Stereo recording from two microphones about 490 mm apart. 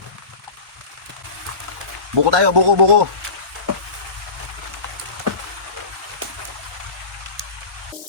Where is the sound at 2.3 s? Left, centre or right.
Right.